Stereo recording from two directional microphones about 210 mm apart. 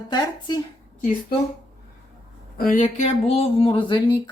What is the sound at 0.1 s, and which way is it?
Speech, 20° left (ahead or behind).